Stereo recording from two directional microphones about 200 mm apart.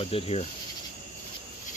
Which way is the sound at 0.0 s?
30° left (ahead or behind).